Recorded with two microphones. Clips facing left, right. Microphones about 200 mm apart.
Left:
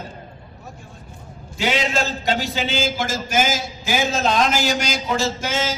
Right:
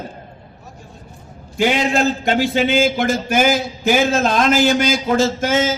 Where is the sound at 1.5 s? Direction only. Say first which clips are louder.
Right 5 dB; 50° right (ahead or behind).